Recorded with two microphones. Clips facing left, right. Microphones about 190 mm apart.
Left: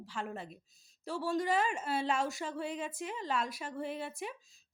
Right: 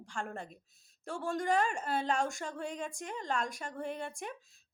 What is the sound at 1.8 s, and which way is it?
Speech, 40° right (ahead or behind).